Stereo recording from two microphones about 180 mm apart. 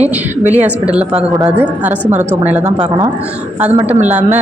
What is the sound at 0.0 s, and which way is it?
Speech, 40° right (ahead or behind).